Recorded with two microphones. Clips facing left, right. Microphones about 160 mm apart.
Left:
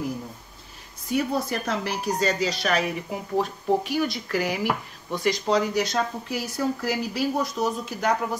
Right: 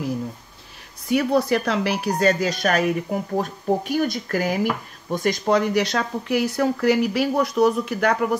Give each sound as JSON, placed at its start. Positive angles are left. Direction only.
{"t": 1.1, "sound": "speech", "side_deg": -70}